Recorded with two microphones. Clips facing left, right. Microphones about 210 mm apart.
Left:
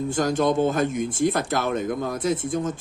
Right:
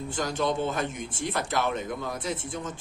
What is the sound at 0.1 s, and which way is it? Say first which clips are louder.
Speech: left 6 dB; 45° left (ahead or behind).